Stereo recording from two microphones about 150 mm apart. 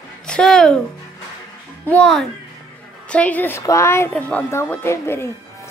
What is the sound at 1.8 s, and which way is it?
Speech, 5° left (ahead or behind).